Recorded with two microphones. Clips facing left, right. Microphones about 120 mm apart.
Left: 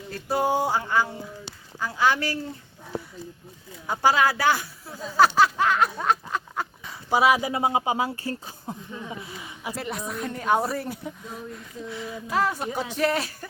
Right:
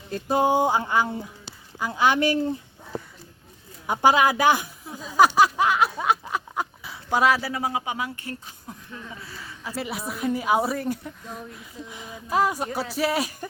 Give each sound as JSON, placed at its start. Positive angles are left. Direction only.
{"t": 0.1, "sound": "a sound", "side_deg": -20}
{"t": 3.8, "sound": "speech", "side_deg": -20}
{"t": 6.9, "sound": "speech", "side_deg": 10}
{"t": 7.5, "sound": "speech", "side_deg": 25}
{"t": 8.9, "sound": "speech", "side_deg": 20}
{"t": 9.7, "sound": "speech", "side_deg": -5}
{"t": 11.9, "sound": "speech", "side_deg": -15}